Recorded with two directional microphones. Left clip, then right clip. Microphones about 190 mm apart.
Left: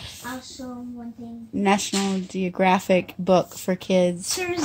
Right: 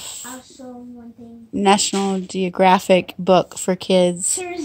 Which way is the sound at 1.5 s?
40° right (ahead or behind).